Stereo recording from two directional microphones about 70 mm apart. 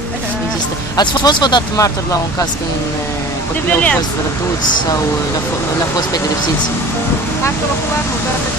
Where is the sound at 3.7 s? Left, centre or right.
Left.